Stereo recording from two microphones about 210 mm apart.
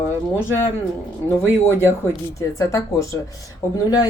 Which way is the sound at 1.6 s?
10° left (ahead or behind).